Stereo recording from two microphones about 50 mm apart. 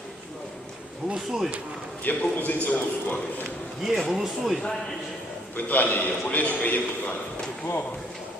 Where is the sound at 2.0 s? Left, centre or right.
Left.